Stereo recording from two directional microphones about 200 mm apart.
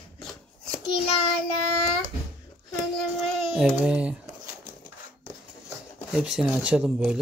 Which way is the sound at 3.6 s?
5° right (ahead or behind).